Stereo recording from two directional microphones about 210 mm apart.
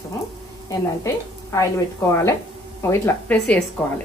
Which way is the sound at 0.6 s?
15° left (ahead or behind).